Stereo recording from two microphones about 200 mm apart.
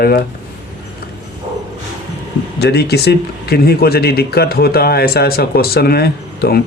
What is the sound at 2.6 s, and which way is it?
Speech, 55° left (ahead or behind).